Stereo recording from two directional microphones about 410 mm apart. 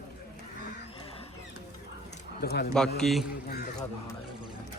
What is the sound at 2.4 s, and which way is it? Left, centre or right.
Speech, left.